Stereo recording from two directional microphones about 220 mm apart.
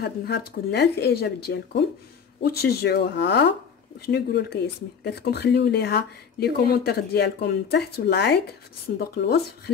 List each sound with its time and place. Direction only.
0.0 s speech: 50° left (ahead or behind)